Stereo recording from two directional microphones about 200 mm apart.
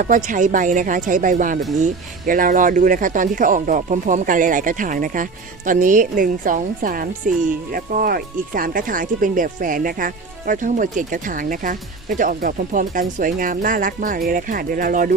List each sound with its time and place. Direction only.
0.0 s speech: 40° right (ahead or behind)